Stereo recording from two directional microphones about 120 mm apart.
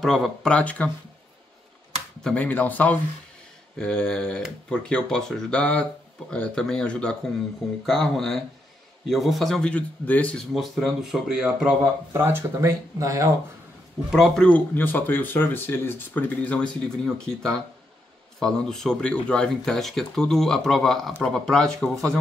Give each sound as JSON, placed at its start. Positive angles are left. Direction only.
{"t": 0.0, "sound": "speech", "side_deg": 0}
{"t": 2.2, "sound": "speech", "side_deg": 15}
{"t": 10.3, "sound": "speech", "side_deg": 0}
{"t": 12.1, "sound": "speech", "side_deg": -20}
{"t": 14.1, "sound": "speech", "side_deg": 0}